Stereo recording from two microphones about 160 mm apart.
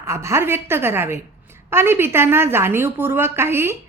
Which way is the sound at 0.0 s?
15° right (ahead or behind).